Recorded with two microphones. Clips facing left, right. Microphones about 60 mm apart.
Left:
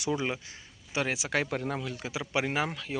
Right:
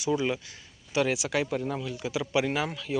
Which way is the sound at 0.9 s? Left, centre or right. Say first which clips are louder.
Right 4 dB; left.